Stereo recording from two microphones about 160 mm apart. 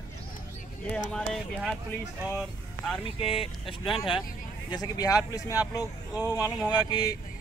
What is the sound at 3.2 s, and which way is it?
Speech, 35° left (ahead or behind).